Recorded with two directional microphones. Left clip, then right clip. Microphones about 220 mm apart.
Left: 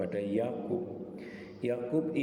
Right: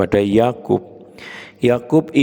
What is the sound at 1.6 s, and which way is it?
Speech, 50° right (ahead or behind).